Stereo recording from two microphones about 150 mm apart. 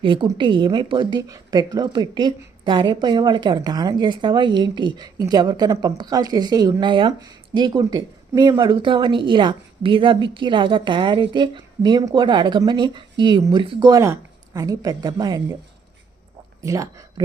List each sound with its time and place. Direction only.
0.0 s a woman's voice: 35° right (ahead or behind)
16.6 s speech: 20° right (ahead or behind)